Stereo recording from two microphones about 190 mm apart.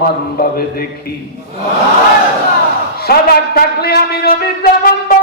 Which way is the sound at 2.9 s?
55° left (ahead or behind).